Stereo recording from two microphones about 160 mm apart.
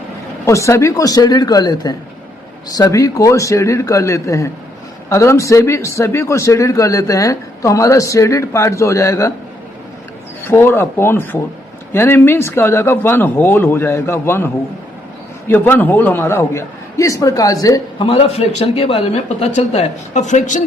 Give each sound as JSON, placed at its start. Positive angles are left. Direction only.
{"t": 0.4, "sound": "a man's voice", "side_deg": 20}
{"t": 10.4, "sound": "speech", "side_deg": 15}
{"t": 18.0, "sound": "a man's voice", "side_deg": 35}